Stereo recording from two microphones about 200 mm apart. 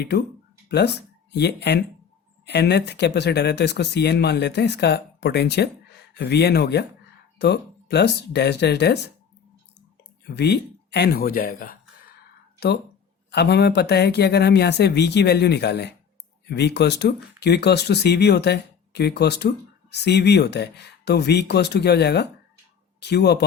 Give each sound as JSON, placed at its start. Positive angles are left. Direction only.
{"t": 0.7, "sound": "speech", "side_deg": 55}
{"t": 10.2, "sound": "speech", "side_deg": 55}